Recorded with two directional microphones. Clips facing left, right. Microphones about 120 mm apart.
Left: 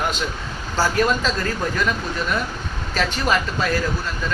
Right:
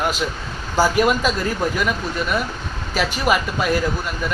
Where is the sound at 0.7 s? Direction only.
15° right (ahead or behind).